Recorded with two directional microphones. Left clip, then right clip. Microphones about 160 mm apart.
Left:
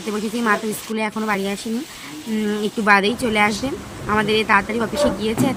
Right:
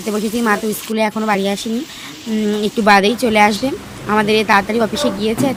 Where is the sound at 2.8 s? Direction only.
30° right (ahead or behind).